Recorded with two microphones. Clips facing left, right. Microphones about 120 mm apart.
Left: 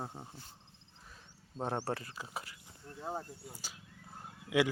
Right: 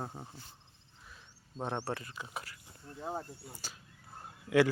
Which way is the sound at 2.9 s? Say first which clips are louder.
Right 1 dB; 5° right (ahead or behind).